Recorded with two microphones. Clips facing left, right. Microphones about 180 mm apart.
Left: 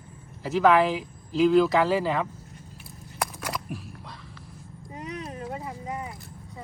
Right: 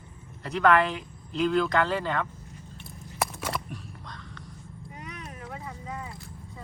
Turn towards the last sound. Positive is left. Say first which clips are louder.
# left 4 dB
turn(degrees=20)  # may be behind; listen again after turning